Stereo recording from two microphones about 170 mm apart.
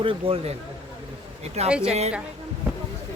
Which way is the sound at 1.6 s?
40° right (ahead or behind).